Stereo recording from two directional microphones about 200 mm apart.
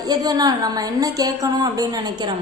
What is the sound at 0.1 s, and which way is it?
A woman's voice, 20° right (ahead or behind).